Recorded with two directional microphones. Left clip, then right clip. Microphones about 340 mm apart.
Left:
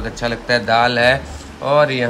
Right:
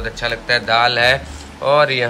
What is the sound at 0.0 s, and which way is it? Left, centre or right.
A man's voice, centre.